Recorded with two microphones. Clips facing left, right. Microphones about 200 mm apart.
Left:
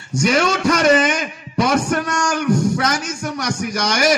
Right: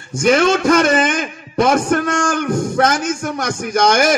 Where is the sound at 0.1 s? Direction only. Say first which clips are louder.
Right 4 dB; 50° right (ahead or behind).